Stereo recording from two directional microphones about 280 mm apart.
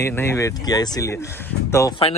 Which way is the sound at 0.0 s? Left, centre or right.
Centre.